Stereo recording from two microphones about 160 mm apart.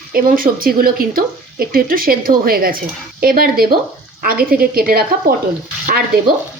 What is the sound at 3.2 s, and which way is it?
Stir, 65° right (ahead or behind).